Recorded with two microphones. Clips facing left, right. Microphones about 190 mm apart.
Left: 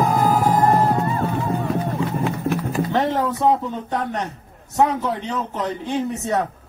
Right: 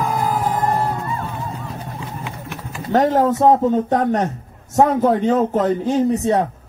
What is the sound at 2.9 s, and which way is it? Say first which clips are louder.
A man's voice: right 8 dB; 45° right (ahead or behind).